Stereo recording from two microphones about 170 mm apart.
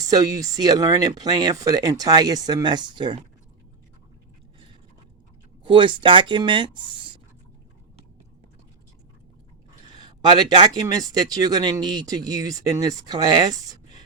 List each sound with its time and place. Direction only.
0.0 s speech: 20° right (ahead or behind)
5.6 s speech: 30° right (ahead or behind)
10.1 s speech: 25° right (ahead or behind)